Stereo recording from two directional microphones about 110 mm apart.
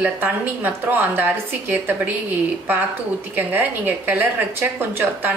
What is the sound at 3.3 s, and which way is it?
A woman's voice, 15° right (ahead or behind).